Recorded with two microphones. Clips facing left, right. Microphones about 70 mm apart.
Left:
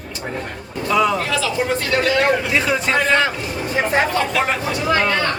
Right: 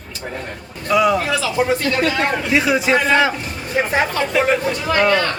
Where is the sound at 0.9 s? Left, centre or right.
Centre.